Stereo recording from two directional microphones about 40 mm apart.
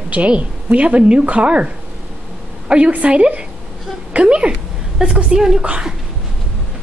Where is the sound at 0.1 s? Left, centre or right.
Right.